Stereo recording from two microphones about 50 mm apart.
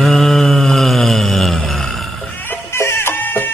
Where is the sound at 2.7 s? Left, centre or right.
Left.